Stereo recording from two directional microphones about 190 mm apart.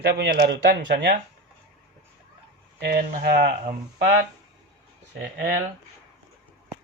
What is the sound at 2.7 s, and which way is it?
Speech, 55° right (ahead or behind).